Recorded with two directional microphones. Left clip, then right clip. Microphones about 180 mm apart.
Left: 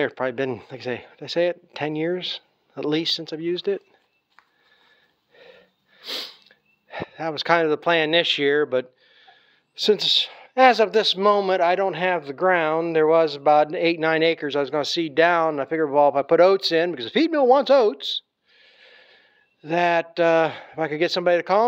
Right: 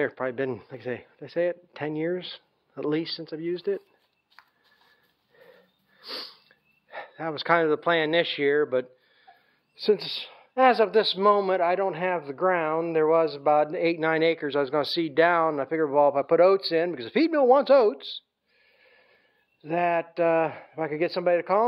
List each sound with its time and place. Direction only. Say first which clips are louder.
0.0 s speech: left 4 dB; 30° left (ahead or behind)
5.4 s sniff: left 5 dB; 20° left (ahead or behind)
6.9 s speech: left 4 dB; 20° left (ahead or behind)